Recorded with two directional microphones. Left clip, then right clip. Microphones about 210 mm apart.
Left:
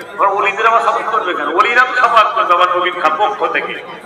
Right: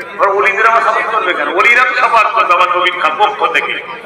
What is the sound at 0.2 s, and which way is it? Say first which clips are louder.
A man's voice: right 2 dB; 60° left (ahead or behind).